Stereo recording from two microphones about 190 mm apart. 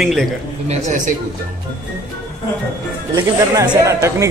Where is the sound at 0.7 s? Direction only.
40° right (ahead or behind).